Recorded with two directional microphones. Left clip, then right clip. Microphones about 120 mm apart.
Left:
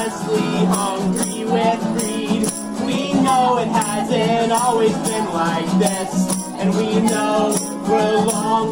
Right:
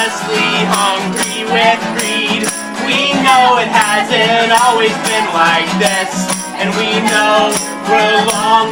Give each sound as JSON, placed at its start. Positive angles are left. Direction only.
{"t": 0.0, "sound": "music", "side_deg": -30}
{"t": 3.5, "sound": "music", "side_deg": -45}
{"t": 3.8, "sound": "music", "side_deg": -30}
{"t": 4.7, "sound": "music", "side_deg": -40}